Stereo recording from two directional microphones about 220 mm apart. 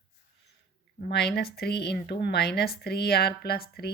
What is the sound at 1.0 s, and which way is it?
Speech, 50° left (ahead or behind).